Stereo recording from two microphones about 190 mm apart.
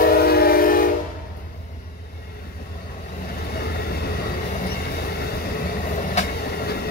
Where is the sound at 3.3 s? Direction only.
55° left (ahead or behind).